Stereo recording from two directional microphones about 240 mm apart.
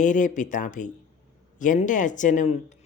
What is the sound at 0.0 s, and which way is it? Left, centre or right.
Speech, left.